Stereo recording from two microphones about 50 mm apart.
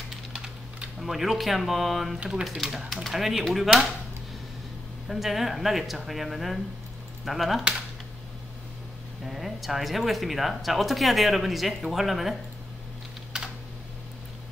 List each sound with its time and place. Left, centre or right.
0.1 s typing: centre
0.9 s speech: centre
5.0 s speech: centre
9.2 s speech: centre